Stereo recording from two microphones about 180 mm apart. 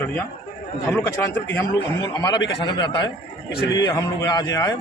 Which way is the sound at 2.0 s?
20° left (ahead or behind).